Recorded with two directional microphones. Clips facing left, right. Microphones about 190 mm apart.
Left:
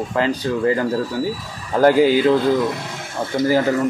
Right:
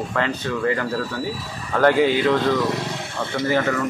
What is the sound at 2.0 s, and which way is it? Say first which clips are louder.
Speech: left 4 dB; 40° left (ahead or behind).